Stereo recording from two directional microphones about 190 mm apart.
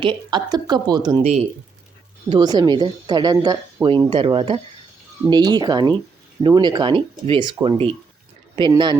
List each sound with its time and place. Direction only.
0.0 s a woman's voice: 25° right (ahead or behind)
2.3 s a woman's voice: 20° right (ahead or behind)